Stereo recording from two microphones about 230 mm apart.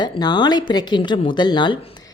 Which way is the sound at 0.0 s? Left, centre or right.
Centre.